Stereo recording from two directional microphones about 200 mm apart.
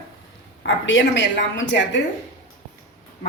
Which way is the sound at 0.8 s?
70° left (ahead or behind).